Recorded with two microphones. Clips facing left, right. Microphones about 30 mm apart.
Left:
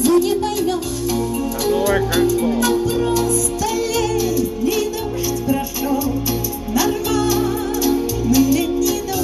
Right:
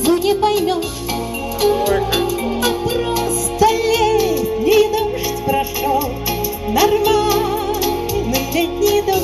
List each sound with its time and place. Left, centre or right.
0.0 s music: right
2.1 s music: right
6.7 s music: right